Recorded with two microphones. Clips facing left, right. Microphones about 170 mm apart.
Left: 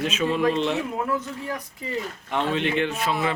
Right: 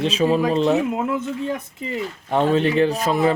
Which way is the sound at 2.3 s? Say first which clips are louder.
Right 7 dB; 40° right (ahead or behind).